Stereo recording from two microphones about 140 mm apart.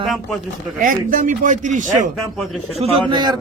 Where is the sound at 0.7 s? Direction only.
70° right (ahead or behind).